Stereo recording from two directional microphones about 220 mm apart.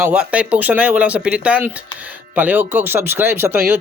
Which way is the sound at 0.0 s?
5° right (ahead or behind).